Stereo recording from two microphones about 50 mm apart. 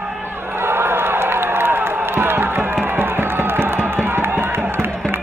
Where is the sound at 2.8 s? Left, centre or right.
Right.